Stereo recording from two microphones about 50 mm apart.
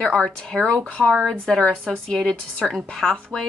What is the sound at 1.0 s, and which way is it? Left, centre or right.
Speech, centre.